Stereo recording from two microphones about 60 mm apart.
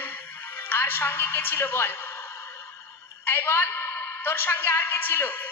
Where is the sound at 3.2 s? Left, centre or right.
Left.